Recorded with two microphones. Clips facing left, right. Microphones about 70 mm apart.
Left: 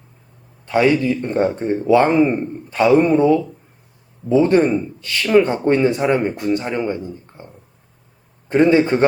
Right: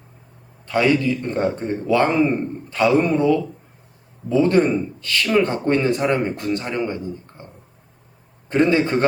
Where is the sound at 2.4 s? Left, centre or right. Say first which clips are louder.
Left 2 dB; centre.